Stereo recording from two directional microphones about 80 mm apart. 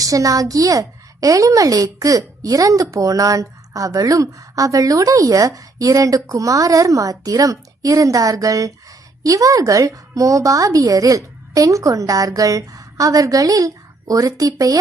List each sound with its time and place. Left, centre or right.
0.0 s a woman's voice: right